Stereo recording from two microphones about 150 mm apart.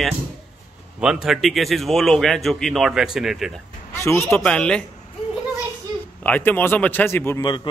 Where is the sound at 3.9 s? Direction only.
20° left (ahead or behind).